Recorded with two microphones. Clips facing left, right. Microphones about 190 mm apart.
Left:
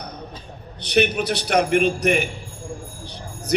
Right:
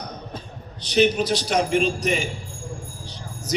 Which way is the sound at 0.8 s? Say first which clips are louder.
Right 1 dB; 60° left (ahead or behind).